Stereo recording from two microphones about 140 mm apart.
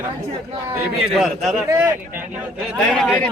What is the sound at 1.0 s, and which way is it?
A man's voice, 5° right (ahead or behind).